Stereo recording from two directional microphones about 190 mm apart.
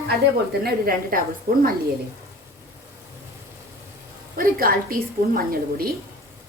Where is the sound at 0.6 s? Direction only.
50° right (ahead or behind).